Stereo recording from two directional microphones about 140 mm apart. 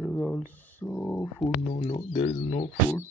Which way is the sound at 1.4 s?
50° left (ahead or behind).